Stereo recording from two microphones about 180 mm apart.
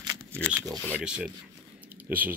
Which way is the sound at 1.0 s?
5° right (ahead or behind).